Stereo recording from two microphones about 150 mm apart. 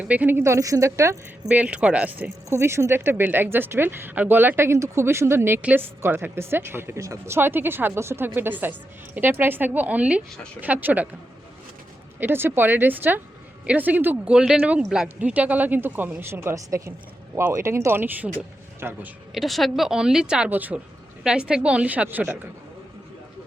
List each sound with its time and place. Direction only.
0.0 s speech: 10° right (ahead or behind)
1.5 s speech: 10° right (ahead or behind)
12.2 s speech: 15° right (ahead or behind)
19.3 s a woman's voice: centre (ahead or behind)